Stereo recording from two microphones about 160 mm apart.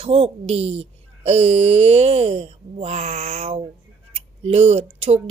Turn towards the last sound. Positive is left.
turn(degrees=-40)  # may be behind; listen again after turning